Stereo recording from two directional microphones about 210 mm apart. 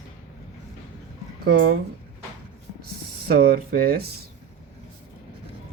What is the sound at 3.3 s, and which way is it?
Speech, 45° right (ahead or behind).